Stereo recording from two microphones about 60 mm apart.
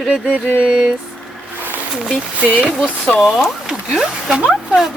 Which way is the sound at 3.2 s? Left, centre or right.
Centre.